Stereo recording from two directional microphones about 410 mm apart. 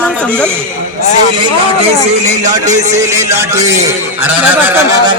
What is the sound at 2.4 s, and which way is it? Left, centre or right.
A man's voice, centre.